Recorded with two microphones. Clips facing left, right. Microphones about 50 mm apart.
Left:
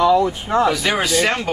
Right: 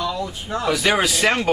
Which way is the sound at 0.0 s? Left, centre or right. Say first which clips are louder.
Left 11 dB; left.